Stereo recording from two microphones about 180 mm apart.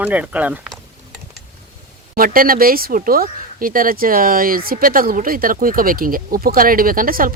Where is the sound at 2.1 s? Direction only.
55° right (ahead or behind).